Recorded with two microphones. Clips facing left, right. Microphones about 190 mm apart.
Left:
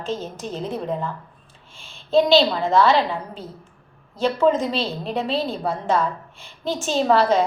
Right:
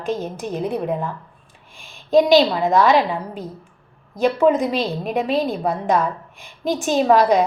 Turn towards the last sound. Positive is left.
turn(degrees=-15)  # may be behind; listen again after turning